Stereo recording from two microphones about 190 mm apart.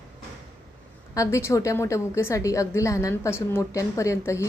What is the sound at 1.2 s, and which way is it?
A woman's voice, 15° left (ahead or behind).